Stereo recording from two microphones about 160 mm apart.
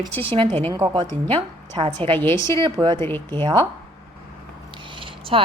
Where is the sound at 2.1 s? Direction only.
15° left (ahead or behind).